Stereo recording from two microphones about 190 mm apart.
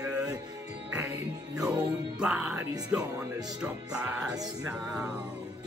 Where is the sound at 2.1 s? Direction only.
5° right (ahead or behind).